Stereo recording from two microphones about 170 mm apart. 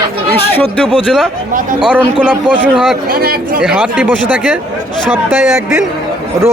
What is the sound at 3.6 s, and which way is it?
Speech, 5° right (ahead or behind).